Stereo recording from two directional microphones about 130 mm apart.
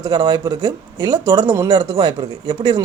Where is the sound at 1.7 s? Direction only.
45° right (ahead or behind).